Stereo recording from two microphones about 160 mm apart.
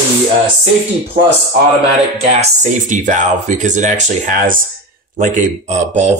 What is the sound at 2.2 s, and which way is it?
Speech, 45° right (ahead or behind).